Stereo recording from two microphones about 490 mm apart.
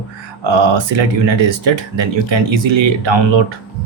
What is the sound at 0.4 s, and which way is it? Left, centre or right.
Speech, right.